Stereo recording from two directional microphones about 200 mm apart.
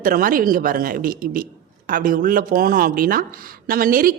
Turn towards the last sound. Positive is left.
turn(degrees=-45)  # may be behind; listen again after turning